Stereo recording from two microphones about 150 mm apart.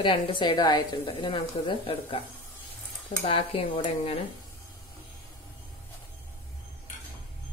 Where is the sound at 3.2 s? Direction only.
40° left (ahead or behind).